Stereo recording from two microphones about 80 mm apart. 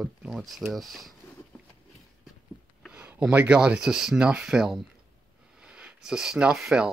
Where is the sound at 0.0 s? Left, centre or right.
Centre.